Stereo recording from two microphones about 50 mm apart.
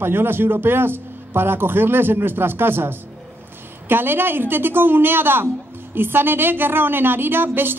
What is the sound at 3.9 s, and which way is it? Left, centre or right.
Speech, right.